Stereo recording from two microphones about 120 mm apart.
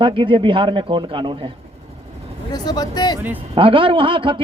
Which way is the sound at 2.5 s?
35° left (ahead or behind).